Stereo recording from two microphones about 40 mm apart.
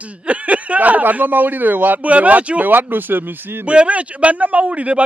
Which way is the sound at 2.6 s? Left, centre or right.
Right.